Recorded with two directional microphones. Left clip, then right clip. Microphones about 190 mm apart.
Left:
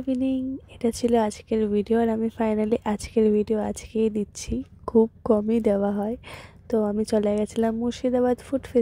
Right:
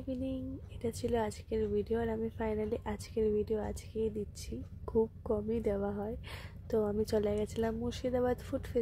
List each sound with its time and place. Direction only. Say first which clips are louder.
0.1 s speech: left 13 dB; 40° left (ahead or behind)